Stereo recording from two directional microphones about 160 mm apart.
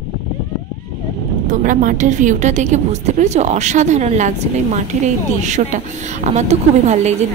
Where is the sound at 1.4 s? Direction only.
55° right (ahead or behind).